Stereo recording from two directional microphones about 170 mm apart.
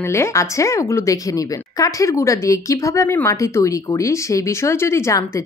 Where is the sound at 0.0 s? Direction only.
15° left (ahead or behind).